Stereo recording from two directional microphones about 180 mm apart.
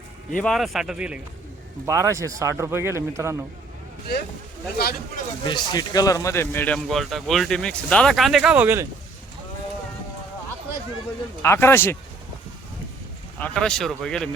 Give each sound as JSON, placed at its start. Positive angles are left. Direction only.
{"t": 0.4, "sound": "speech", "side_deg": 0}
{"t": 1.9, "sound": "speech", "side_deg": -15}
{"t": 4.8, "sound": "speech", "side_deg": 55}
{"t": 5.5, "sound": "speech", "side_deg": 25}
{"t": 11.4, "sound": "speech", "side_deg": 15}
{"t": 13.4, "sound": "speech", "side_deg": 5}